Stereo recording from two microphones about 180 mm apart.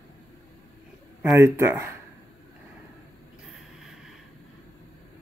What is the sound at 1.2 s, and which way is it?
Speech, 10° right (ahead or behind).